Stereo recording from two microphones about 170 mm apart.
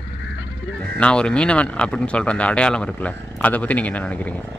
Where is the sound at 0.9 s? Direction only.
5° left (ahead or behind).